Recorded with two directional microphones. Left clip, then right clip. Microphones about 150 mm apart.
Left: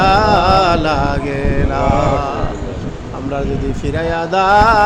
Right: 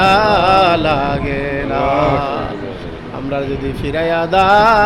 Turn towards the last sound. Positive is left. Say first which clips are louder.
# even
turn(degrees=-15)  # may be behind; listen again after turning